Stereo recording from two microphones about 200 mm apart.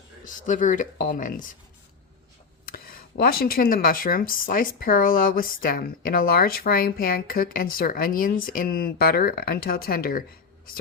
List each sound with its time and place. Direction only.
0.4 s speech: 40° left (ahead or behind)
2.6 s speech: 45° left (ahead or behind)